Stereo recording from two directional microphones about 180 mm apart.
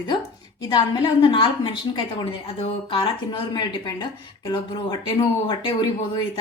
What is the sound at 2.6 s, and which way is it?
Speech, 30° left (ahead or behind).